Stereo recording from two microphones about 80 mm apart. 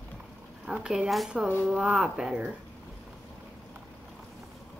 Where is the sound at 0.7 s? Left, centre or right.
Centre.